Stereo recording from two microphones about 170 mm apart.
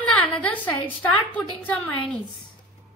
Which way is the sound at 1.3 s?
10° left (ahead or behind).